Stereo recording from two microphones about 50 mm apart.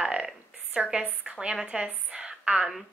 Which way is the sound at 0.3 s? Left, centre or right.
Centre.